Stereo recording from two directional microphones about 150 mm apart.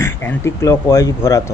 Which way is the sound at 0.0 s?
15° left (ahead or behind).